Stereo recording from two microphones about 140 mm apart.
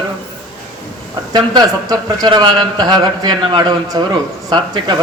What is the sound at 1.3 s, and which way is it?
A man's voice, 30° right (ahead or behind).